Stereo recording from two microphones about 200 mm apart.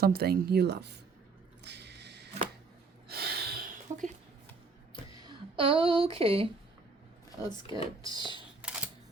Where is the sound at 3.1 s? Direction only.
50° right (ahead or behind).